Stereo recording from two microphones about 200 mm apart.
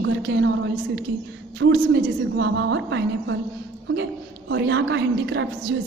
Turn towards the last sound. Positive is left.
turn(degrees=-70)  # may be behind; listen again after turning